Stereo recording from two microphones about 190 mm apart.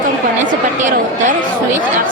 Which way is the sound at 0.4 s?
40° right (ahead or behind).